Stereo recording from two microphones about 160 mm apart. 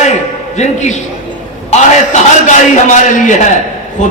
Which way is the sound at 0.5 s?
45° left (ahead or behind).